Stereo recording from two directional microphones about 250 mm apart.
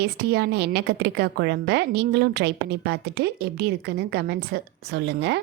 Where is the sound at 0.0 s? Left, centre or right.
Right.